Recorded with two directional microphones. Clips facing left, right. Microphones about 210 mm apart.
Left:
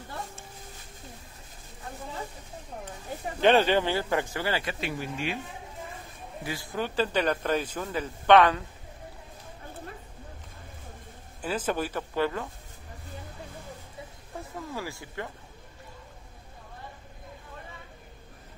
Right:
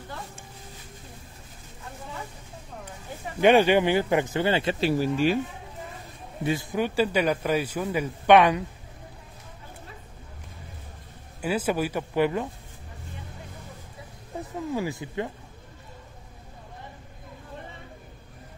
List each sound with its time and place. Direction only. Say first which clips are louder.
3.3 s speech: right 3 dB; 10° right (ahead or behind); by 5.4 s 35° right (ahead or behind)
6.4 s speech: right 7 dB; 20° right (ahead or behind)
11.4 s speech: right 4 dB; 10° right (ahead or behind)
14.3 s speech: right 7 dB; 20° right (ahead or behind)